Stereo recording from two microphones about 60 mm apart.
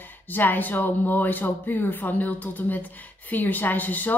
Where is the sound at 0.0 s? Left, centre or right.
Left.